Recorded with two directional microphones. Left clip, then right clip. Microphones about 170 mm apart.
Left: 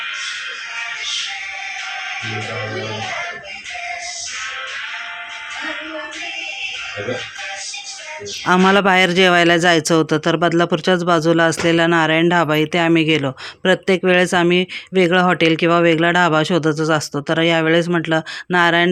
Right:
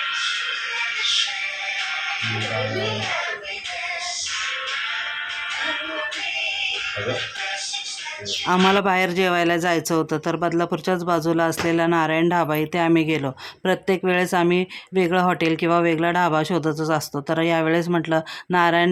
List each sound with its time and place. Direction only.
8.4 s speech: 20° left (ahead or behind)